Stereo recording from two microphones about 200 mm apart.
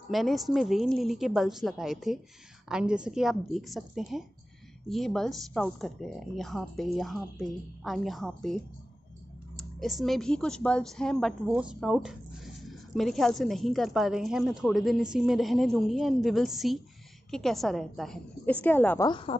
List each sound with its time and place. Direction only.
0.1 s speech: centre (ahead or behind)
9.6 s speech: centre (ahead or behind)
19.0 s speech: 25° left (ahead or behind)